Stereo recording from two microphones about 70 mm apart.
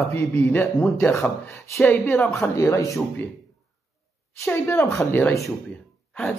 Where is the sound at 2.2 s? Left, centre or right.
Left.